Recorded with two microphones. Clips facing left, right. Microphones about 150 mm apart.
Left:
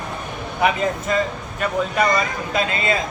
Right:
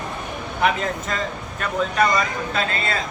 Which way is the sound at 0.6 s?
10° left (ahead or behind).